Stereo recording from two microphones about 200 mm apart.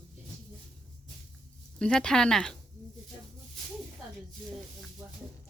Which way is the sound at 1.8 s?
5° left (ahead or behind).